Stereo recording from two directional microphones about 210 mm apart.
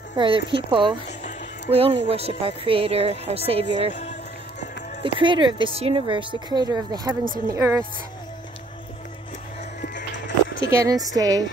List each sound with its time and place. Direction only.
0.1 s a woman's voice: 25° right (ahead or behind)
5.0 s a woman's voice: 20° right (ahead or behind)
9.8 s music: 45° left (ahead or behind)
10.7 s a woman's voice: 15° right (ahead or behind)